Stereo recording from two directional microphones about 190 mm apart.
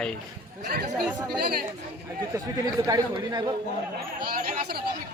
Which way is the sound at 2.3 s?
20° right (ahead or behind).